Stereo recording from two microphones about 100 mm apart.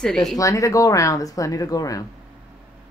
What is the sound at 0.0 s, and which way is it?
Speech, 5° left (ahead or behind).